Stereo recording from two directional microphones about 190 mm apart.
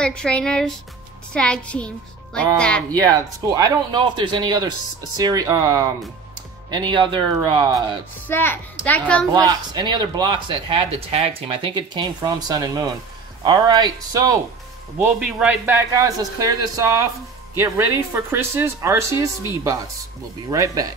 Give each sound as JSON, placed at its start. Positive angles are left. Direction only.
{"t": 0.0, "sound": "speech", "side_deg": 5}
{"t": 2.9, "sound": "speech", "side_deg": -20}
{"t": 8.3, "sound": "a woman's voice", "side_deg": 10}
{"t": 9.3, "sound": "speech", "side_deg": -20}
{"t": 15.0, "sound": "speech", "side_deg": 0}
{"t": 15.6, "sound": "speech", "side_deg": -15}
{"t": 20.4, "sound": "speech", "side_deg": -20}